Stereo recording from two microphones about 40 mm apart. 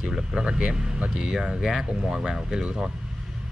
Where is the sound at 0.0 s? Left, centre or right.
Centre.